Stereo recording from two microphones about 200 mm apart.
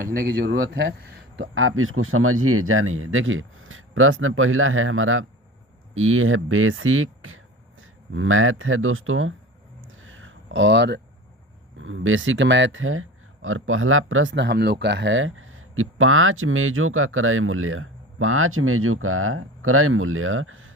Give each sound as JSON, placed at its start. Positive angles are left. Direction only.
{"t": 0.0, "sound": "a man's voice", "side_deg": -45}
{"t": 1.5, "sound": "speech", "side_deg": -90}
{"t": 9.9, "sound": "a sound", "side_deg": -80}
{"t": 11.8, "sound": "speech", "side_deg": -75}